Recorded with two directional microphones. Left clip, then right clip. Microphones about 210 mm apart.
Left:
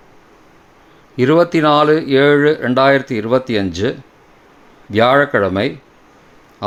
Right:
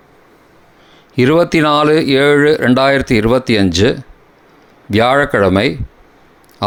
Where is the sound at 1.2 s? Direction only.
30° right (ahead or behind).